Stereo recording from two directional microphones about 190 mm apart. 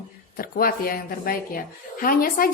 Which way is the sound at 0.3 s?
50° left (ahead or behind).